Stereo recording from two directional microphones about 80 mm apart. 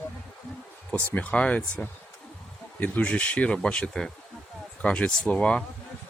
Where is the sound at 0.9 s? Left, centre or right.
Centre.